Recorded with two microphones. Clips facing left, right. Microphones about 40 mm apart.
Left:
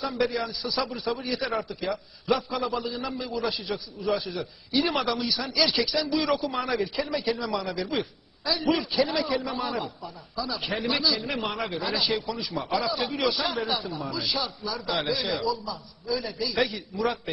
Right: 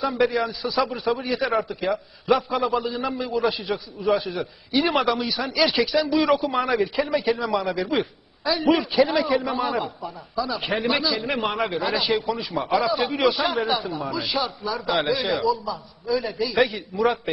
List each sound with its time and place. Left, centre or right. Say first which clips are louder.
0.0 s a man's voice: right 5 dB; centre